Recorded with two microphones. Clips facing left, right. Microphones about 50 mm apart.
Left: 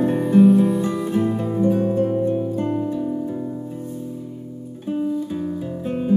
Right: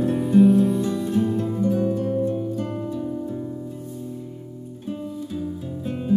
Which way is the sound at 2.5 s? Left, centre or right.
Left.